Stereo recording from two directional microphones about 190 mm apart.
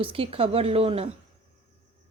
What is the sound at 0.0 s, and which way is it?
Speech, 30° right (ahead or behind).